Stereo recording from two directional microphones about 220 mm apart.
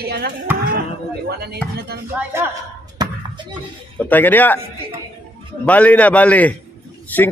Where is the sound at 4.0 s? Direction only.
10° left (ahead or behind).